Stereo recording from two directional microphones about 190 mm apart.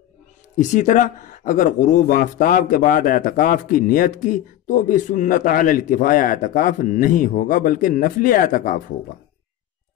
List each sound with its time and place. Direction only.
0.6 s speech: 40° left (ahead or behind)